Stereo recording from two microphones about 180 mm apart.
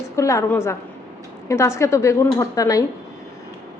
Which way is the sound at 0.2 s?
15° left (ahead or behind).